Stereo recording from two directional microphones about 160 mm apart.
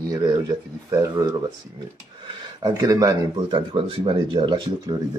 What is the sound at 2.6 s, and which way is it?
Speech, 20° right (ahead or behind).